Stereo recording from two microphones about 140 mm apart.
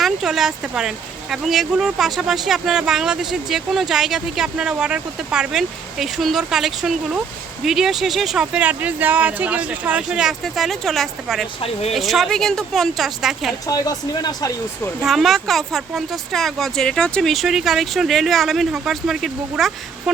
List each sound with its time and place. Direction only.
0.0 s speech: centre (ahead or behind)
11.6 s speech: 50° left (ahead or behind)
11.9 s speech: centre (ahead or behind)
13.7 s speech: 25° left (ahead or behind)
15.0 s speech: centre (ahead or behind)